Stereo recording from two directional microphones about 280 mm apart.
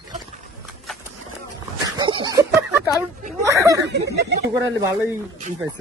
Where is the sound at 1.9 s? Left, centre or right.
Centre.